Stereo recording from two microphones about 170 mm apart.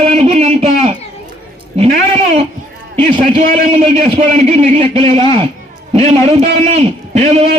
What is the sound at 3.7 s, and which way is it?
A man's voice, 40° right (ahead or behind).